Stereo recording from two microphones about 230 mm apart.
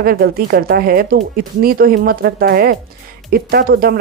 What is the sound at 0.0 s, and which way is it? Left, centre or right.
Speech, right.